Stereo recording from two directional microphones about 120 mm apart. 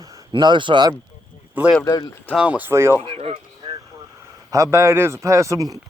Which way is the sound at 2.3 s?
10° right (ahead or behind).